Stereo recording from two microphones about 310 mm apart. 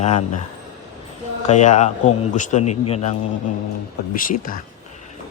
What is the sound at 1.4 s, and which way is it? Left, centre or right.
A man's voice, left.